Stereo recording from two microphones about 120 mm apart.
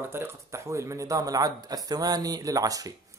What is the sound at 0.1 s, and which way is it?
A man's voice, 20° right (ahead or behind).